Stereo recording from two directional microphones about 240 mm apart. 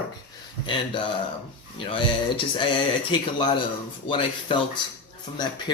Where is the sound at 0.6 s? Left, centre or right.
Centre.